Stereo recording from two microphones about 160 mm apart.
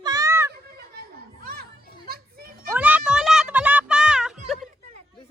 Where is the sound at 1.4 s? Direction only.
70° right (ahead or behind).